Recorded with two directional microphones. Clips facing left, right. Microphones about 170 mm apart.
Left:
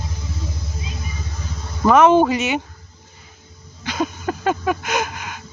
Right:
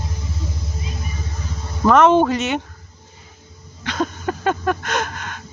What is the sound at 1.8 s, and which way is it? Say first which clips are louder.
Speech: even; centre (ahead or behind).